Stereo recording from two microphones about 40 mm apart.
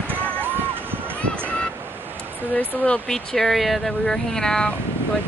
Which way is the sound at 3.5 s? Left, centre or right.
Centre.